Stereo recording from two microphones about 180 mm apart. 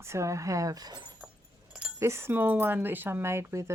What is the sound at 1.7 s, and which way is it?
Speech, 10° right (ahead or behind).